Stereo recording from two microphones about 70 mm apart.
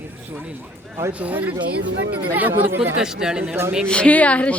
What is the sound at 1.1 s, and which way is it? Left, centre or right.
Speech, right.